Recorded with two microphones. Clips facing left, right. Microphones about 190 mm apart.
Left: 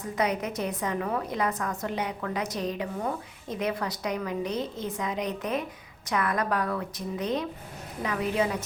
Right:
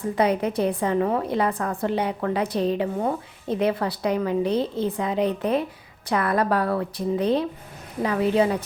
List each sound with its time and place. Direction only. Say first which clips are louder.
0.2 s a woman's voice: right 6 dB; 30° right (ahead or behind)